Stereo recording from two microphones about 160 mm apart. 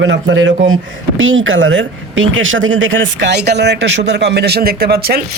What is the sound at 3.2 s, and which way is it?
Speech, 90° right.